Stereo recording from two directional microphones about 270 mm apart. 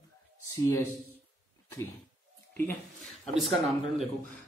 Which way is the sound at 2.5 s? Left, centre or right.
Centre.